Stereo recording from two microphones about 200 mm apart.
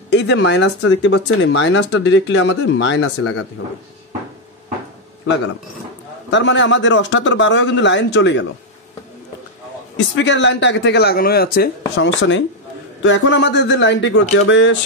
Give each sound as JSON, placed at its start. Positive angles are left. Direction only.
{"t": 0.1, "sound": "speech", "side_deg": 60}
{"t": 6.3, "sound": "speech", "side_deg": 65}
{"t": 9.9, "sound": "speech", "side_deg": 60}